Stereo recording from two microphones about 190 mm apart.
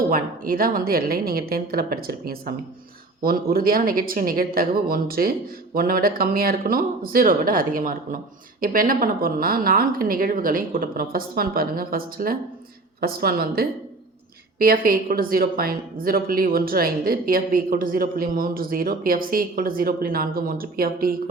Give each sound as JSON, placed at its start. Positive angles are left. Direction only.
{"t": 0.1, "sound": "a woman's voice", "side_deg": -50}